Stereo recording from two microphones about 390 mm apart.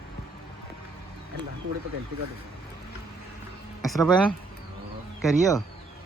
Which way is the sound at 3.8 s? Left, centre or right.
Centre.